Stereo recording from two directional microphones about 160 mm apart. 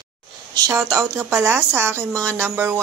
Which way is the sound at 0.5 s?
20° right (ahead or behind).